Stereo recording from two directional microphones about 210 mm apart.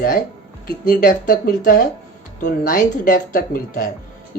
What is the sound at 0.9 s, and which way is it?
Speech, 40° left (ahead or behind).